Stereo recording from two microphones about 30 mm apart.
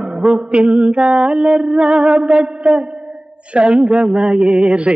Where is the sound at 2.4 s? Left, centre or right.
Centre.